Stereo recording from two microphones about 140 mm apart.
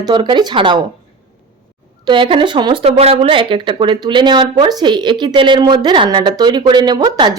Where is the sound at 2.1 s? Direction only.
35° right (ahead or behind).